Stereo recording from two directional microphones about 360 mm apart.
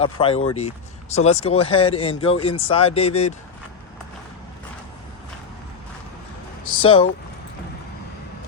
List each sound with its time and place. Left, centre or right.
0.0 s speech: centre
6.8 s speech: centre